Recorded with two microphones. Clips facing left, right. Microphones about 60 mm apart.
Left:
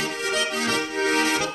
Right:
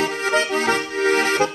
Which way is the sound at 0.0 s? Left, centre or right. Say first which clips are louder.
Right 5 dB; right.